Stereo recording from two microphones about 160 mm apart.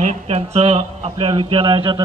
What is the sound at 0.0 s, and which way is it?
A man's voice, 50° right (ahead or behind).